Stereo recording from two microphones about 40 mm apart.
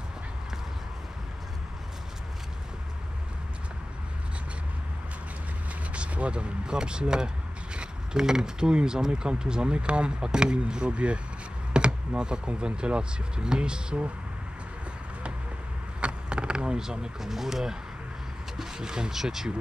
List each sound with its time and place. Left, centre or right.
5.9 s speech: right
16.0 s speech: right